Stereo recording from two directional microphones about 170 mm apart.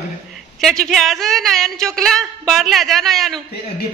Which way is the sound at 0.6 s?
Centre (ahead or behind).